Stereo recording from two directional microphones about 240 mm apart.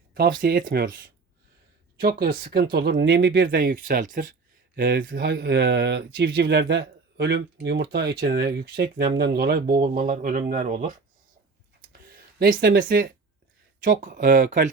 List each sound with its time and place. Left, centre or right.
0.1 s speech: right
11.9 s a sound: right
13.8 s speech: right